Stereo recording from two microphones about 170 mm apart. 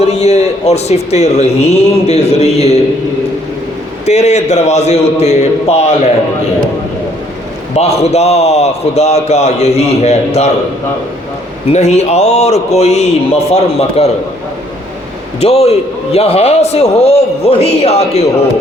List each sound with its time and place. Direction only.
0.0 s speech: 40° left (ahead or behind)
4.0 s speech: 40° left (ahead or behind)
7.8 s speech: 40° left (ahead or behind)
11.7 s speech: 40° left (ahead or behind)
15.4 s speech: 35° left (ahead or behind)